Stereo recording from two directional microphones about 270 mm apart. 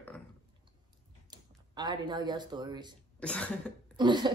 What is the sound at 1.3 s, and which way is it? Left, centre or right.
Speech, centre.